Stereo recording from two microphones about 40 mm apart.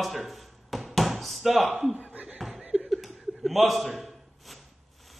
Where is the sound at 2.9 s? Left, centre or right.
Centre.